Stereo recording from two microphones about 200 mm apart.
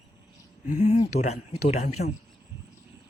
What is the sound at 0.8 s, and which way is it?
Speech, 35° left (ahead or behind).